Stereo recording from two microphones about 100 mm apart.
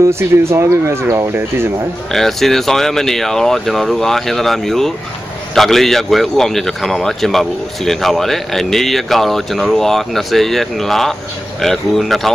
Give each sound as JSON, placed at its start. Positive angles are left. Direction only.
{"t": 0.1, "sound": "speech", "side_deg": -25}
{"t": 2.1, "sound": "a man's voice", "side_deg": 5}